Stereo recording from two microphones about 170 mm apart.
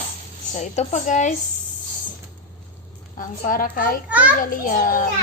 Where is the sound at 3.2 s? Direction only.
55° left (ahead or behind).